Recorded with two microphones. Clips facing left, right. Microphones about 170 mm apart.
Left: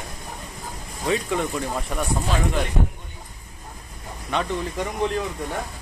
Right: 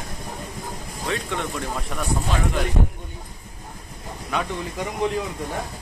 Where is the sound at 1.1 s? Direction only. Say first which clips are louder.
Left 4 dB; 5° left (ahead or behind).